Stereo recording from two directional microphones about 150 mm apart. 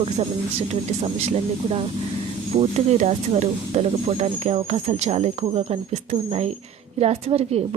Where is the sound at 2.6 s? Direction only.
45° right (ahead or behind).